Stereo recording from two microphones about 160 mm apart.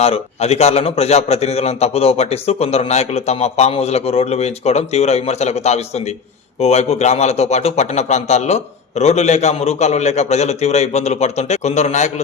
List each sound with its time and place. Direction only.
0.0 s a man's voice: 40° left (ahead or behind)